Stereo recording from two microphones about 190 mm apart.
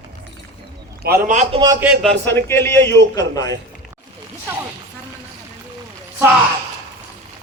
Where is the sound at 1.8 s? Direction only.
Centre (ahead or behind).